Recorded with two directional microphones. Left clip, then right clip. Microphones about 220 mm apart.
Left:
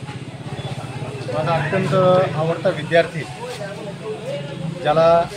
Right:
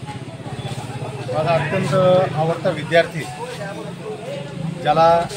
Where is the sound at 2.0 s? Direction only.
5° left (ahead or behind).